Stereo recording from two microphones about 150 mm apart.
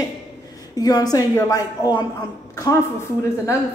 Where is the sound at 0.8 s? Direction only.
25° left (ahead or behind).